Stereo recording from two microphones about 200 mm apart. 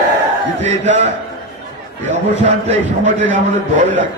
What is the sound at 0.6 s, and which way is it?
Speech, 35° right (ahead or behind).